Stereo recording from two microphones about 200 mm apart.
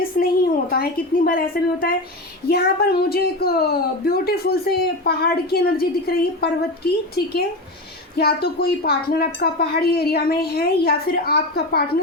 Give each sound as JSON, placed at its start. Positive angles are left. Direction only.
{"t": 0.1, "sound": "a woman's voice", "side_deg": 50}
{"t": 8.1, "sound": "a woman's voice", "side_deg": 50}